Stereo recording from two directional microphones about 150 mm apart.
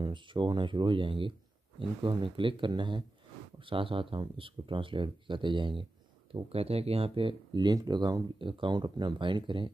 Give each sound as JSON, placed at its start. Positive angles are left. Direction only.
{"t": 0.0, "sound": "speech", "side_deg": -30}